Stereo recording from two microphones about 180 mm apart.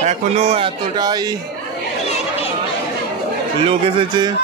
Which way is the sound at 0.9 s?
20° right (ahead or behind).